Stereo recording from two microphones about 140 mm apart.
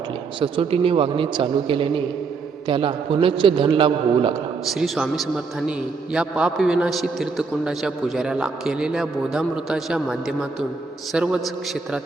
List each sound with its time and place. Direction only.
0.3 s a man's voice: 35° right (ahead or behind)
4.7 s a man's voice: centre (ahead or behind)